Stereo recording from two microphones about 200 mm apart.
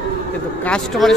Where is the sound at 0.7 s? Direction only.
Centre (ahead or behind).